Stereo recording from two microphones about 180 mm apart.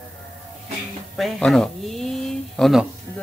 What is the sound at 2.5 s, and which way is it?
Speech, centre (ahead or behind).